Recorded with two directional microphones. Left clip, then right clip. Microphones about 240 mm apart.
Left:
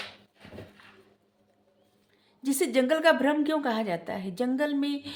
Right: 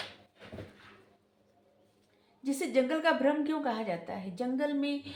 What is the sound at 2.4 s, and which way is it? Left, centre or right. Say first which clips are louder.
A woman's voice: left 4 dB; left.